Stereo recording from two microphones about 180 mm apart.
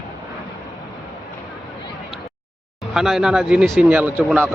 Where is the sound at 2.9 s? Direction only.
Centre (ahead or behind).